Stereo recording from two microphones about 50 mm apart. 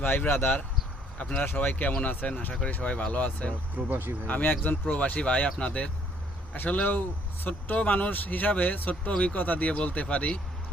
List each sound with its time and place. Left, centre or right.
0.0 s speech: left
1.2 s speech: left
2.6 s speech: left
3.8 s speech: right
4.3 s speech: left